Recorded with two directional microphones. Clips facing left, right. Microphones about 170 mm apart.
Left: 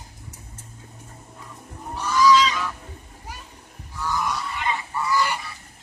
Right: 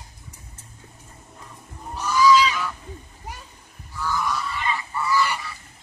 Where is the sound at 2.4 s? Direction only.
5° right (ahead or behind).